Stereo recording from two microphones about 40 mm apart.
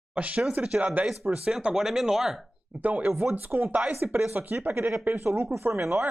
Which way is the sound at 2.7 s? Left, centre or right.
Right.